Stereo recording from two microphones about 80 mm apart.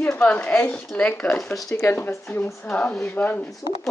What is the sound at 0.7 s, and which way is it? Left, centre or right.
Speech, centre.